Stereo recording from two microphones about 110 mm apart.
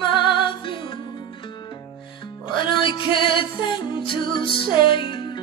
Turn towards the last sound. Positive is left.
turn(degrees=45)  # may be behind; listen again after turning